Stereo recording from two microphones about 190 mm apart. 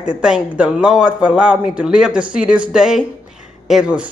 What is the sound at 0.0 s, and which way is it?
Speech, 5° right (ahead or behind).